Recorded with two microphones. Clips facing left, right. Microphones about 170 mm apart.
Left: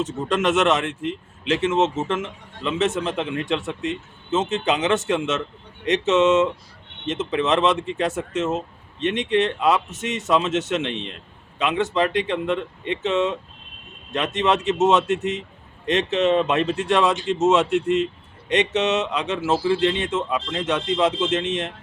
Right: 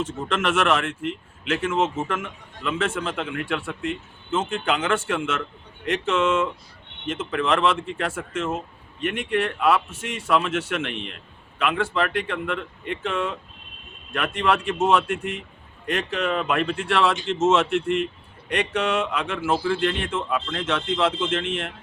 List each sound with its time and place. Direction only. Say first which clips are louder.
0.2 s speech: left 4 dB; 15° left (ahead or behind)